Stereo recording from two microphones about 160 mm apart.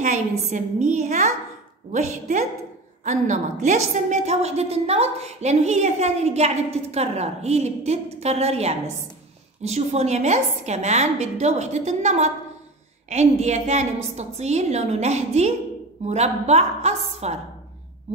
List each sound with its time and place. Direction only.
0.0 s a woman's voice: 50° right (ahead or behind)